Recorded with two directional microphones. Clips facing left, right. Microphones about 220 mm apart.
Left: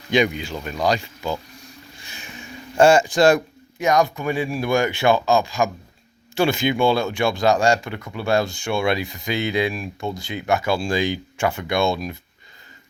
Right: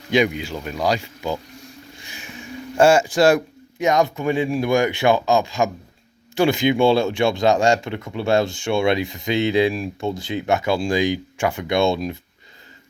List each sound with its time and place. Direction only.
0.1 s speech: 5° right (ahead or behind)
2.7 s speech: 5° right (ahead or behind)
3.8 s speech: 20° right (ahead or behind)